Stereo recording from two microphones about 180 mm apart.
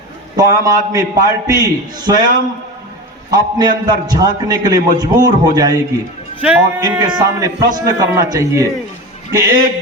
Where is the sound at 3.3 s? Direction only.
20° right (ahead or behind).